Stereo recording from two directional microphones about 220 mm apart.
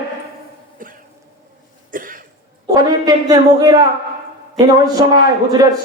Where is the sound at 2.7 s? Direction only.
15° right (ahead or behind).